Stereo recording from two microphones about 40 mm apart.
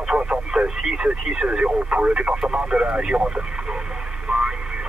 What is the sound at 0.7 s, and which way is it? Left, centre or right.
Speech, centre.